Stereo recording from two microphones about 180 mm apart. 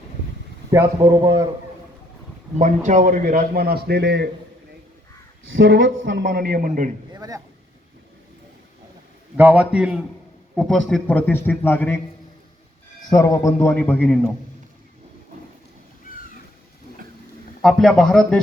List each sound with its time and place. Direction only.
0.7 s a man's voice: 15° right (ahead or behind)
2.6 s a man's voice: 45° right (ahead or behind); by 4.3 s 65° right (ahead or behind)
5.5 s a man's voice: 90° right; by 6.9 s 45° right (ahead or behind)
7.1 s a man's voice: 20° right (ahead or behind)
9.4 s a man's voice: 5° right (ahead or behind); by 11.9 s 10° left (ahead or behind)
13.1 s a man's voice: 20° left (ahead or behind)
17.6 s a man's voice: centre (ahead or behind)